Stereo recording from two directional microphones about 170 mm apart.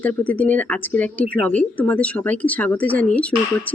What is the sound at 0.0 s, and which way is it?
Speech, 10° left (ahead or behind).